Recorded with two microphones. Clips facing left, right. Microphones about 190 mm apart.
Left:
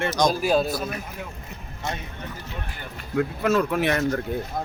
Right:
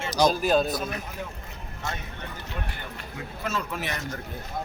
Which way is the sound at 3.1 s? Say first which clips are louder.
Left 11 dB; 60° left (ahead or behind).